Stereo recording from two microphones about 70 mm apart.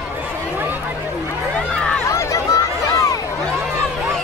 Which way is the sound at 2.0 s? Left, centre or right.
Left.